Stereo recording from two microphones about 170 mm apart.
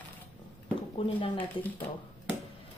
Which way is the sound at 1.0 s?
30° left (ahead or behind).